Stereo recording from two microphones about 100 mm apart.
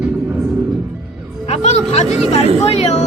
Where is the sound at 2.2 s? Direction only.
85° left.